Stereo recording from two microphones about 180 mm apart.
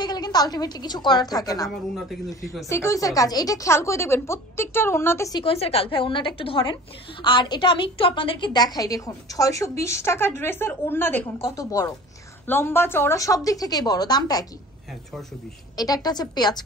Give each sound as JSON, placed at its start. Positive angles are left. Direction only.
{"t": 0.0, "sound": "a woman's voice", "side_deg": 25}
{"t": 2.0, "sound": "speech", "side_deg": 0}
{"t": 2.7, "sound": "a woman's voice", "side_deg": 15}
{"t": 5.4, "sound": "a woman's voice", "side_deg": 35}
{"t": 15.7, "sound": "a woman's voice", "side_deg": 20}